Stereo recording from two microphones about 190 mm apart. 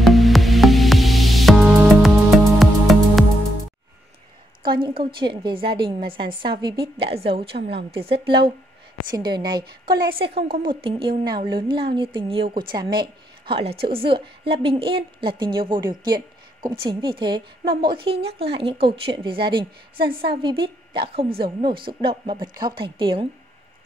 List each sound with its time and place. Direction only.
0.0 s music: centre (ahead or behind)
4.6 s a woman's voice: 25° right (ahead or behind)
7.5 s a woman's voice: 60° right (ahead or behind)
7.9 s a woman's voice: 30° right (ahead or behind)
9.8 s a woman's voice: 55° right (ahead or behind)
10.6 s a woman's voice: 25° right (ahead or behind)